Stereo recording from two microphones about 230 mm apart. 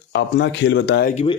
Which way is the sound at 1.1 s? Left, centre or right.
Left.